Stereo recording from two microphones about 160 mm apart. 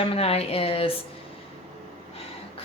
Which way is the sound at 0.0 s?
35° left (ahead or behind).